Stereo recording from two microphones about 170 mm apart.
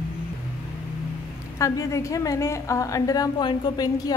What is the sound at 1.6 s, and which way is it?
A woman's voice, 20° left (ahead or behind).